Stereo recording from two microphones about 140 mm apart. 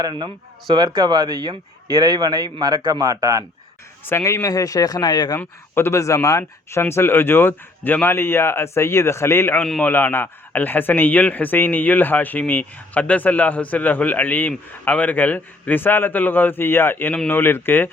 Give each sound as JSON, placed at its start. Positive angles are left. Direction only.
{"t": 0.0, "sound": "a man's voice", "side_deg": -35}
{"t": 4.0, "sound": "speech", "side_deg": 20}
{"t": 5.4, "sound": "a man's voice", "side_deg": 15}